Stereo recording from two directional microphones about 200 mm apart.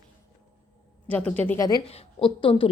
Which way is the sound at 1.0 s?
5° left (ahead or behind).